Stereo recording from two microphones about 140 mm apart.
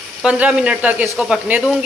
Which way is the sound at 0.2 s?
5° right (ahead or behind).